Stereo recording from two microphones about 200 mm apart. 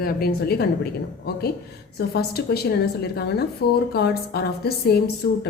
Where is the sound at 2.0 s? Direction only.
50° left (ahead or behind).